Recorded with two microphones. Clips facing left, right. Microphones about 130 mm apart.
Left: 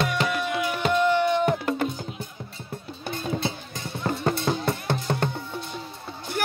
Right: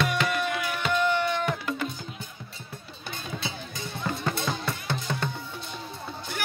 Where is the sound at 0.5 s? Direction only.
20° left (ahead or behind).